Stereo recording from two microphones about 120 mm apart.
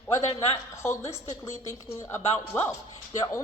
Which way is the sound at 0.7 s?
25° left (ahead or behind).